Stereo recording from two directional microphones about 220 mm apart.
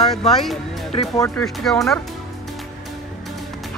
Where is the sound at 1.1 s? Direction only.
15° left (ahead or behind).